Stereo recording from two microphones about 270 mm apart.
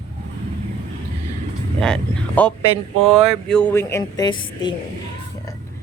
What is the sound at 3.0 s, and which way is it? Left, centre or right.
A woman's voice, centre.